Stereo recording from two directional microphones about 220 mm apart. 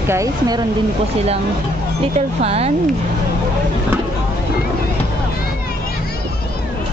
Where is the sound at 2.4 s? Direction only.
25° right (ahead or behind).